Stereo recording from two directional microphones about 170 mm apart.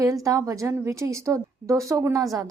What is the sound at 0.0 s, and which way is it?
A woman's voice, 20° right (ahead or behind).